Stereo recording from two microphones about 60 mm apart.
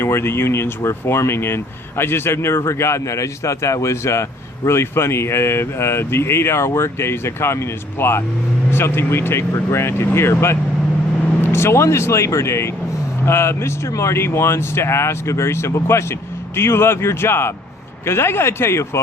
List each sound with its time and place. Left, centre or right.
0.0 s speech: left